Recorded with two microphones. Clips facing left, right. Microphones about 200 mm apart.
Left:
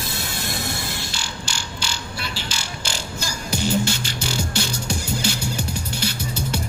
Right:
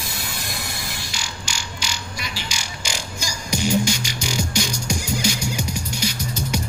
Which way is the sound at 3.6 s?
10° right (ahead or behind).